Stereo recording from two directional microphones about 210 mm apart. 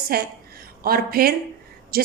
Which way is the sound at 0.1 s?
45° right (ahead or behind).